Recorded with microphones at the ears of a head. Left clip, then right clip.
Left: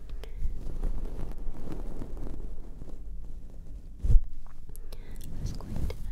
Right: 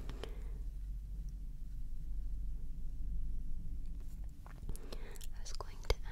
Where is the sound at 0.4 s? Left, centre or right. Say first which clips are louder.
Left 14 dB; left.